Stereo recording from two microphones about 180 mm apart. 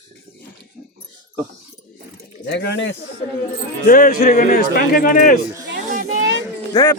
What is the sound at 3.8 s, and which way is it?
A man's voice, 50° left (ahead or behind).